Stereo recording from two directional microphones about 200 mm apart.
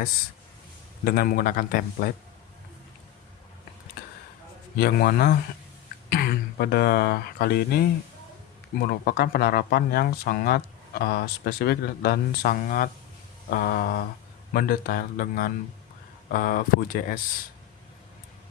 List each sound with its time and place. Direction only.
1.0 s speech: 50° left (ahead or behind)
4.8 s speech: 50° left (ahead or behind)